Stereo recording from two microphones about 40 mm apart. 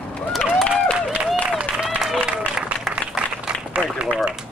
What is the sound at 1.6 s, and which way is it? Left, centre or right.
Applause, centre.